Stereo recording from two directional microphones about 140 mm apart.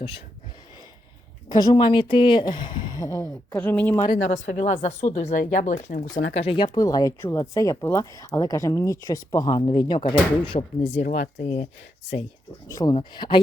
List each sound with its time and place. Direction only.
1.5 s speech: 30° left (ahead or behind); by 4.0 s 15° left (ahead or behind)
4.3 s speech: 60° left (ahead or behind)
6.3 s speech: 45° left (ahead or behind)
6.7 s speech: 25° left (ahead or behind)
11.0 s speech: 60° left (ahead or behind)
12.9 s speech: 35° left (ahead or behind)